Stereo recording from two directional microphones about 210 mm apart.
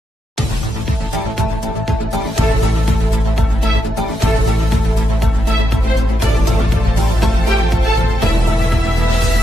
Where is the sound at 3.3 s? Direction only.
Centre (ahead or behind).